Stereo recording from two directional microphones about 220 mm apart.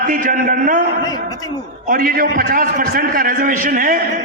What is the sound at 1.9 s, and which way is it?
A man's voice, 40° right (ahead or behind).